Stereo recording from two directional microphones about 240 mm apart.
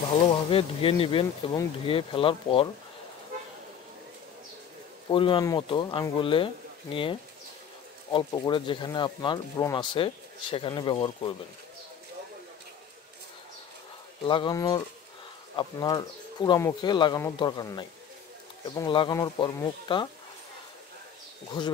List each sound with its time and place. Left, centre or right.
0.5 s speech: left
5.1 s speech: left
14.2 s speech: left
21.6 s speech: centre